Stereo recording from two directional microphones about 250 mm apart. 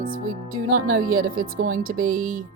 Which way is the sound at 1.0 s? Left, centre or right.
Right.